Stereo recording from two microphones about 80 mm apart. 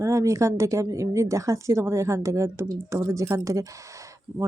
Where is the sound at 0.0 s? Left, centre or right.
Right.